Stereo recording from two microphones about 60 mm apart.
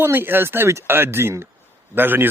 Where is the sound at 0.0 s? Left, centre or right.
Right.